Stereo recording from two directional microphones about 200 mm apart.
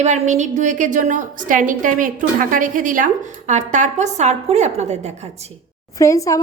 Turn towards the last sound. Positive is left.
turn(degrees=15)  # may be behind; listen again after turning